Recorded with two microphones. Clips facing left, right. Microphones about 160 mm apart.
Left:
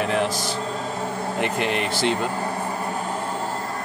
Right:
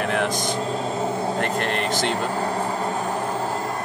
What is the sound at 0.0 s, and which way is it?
Music, 55° right (ahead or behind).